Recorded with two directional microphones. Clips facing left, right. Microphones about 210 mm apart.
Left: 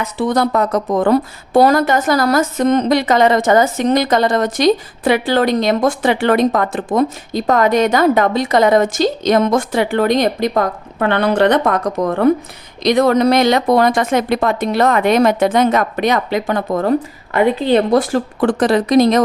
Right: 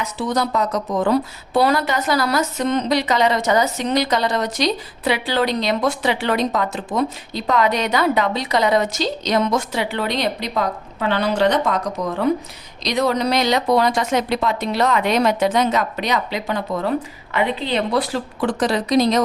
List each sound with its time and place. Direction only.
0.0 s speech: 55° left (ahead or behind)